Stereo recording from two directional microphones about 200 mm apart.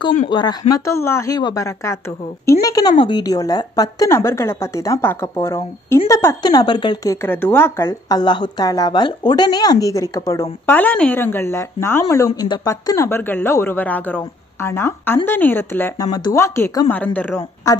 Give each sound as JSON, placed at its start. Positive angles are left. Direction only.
{"t": 0.3, "sound": "a woman's voice", "side_deg": 20}